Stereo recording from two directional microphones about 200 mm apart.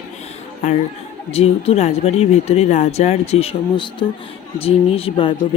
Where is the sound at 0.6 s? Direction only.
35° left (ahead or behind).